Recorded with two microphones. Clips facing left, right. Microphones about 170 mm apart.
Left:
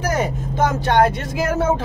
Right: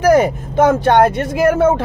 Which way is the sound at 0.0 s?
65° right (ahead or behind).